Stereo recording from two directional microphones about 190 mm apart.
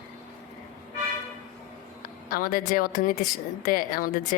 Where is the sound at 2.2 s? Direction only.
50° left (ahead or behind).